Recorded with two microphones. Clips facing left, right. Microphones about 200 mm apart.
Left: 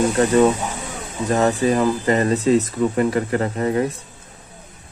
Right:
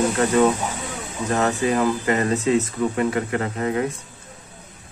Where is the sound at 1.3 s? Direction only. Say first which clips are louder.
Left 3 dB; 35° left (ahead or behind).